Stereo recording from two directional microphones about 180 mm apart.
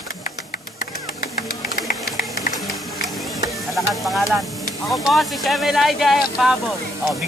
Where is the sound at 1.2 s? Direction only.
50° left (ahead or behind).